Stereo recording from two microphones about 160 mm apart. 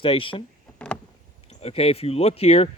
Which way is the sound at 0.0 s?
35° left (ahead or behind).